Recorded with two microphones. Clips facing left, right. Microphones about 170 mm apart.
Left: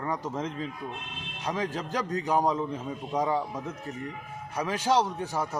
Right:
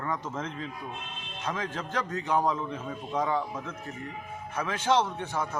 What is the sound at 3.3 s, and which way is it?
Speech, 40° left (ahead or behind).